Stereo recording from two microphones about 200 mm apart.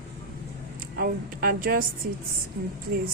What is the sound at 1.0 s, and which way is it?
A woman's voice, 45° right (ahead or behind).